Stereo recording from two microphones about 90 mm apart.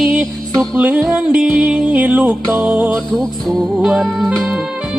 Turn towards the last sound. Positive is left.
turn(degrees=-5)  # may be behind; listen again after turning